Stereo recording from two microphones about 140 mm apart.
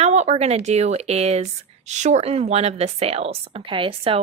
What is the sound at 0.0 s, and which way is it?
A woman's voice, 55° right (ahead or behind).